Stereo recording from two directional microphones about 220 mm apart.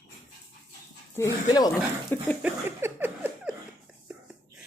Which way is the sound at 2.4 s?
10° right (ahead or behind).